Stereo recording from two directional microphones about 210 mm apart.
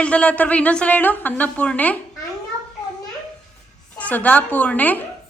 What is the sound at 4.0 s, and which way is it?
Speech, 5° left (ahead or behind).